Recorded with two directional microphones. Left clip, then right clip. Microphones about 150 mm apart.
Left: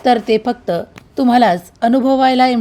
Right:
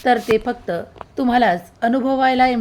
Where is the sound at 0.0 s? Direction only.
40° left (ahead or behind).